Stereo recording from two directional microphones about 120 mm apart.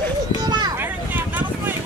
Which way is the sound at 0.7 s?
15° right (ahead or behind).